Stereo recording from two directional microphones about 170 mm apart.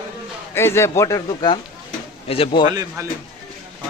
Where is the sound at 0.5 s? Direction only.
15° left (ahead or behind); by 2.7 s 30° left (ahead or behind).